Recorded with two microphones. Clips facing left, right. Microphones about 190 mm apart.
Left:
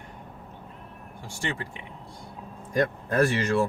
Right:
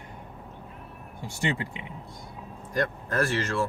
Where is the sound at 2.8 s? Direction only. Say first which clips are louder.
Left 4 dB; 15° left (ahead or behind).